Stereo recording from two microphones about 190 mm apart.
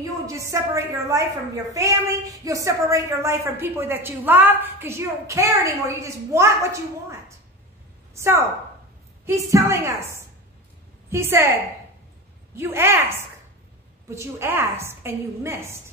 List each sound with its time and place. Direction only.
0.3 s a woman's voice: 15° right (ahead or behind)